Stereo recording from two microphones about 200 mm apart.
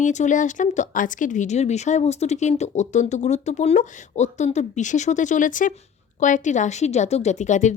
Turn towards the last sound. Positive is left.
turn(degrees=35)  # may be behind; listen again after turning